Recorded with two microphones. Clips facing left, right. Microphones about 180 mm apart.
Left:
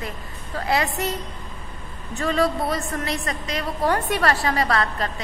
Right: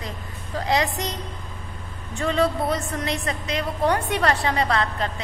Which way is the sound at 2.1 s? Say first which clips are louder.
Even; 20° right (ahead or behind).